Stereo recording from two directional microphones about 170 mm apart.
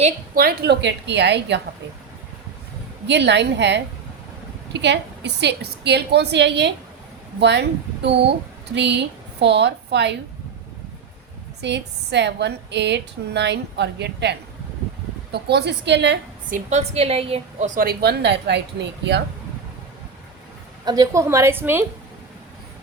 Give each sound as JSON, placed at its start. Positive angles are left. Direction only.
{"t": 0.3, "sound": "a woman's voice", "side_deg": -65}
{"t": 3.1, "sound": "a woman's voice", "side_deg": -90}
{"t": 11.6, "sound": "a woman's voice", "side_deg": -90}
{"t": 15.3, "sound": "a woman's voice", "side_deg": -75}
{"t": 16.5, "sound": "a woman's voice", "side_deg": -50}
{"t": 17.7, "sound": "a woman's voice", "side_deg": -65}
{"t": 20.8, "sound": "a woman's voice", "side_deg": -25}